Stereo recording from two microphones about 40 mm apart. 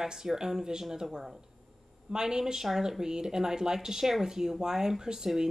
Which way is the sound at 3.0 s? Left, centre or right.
Centre.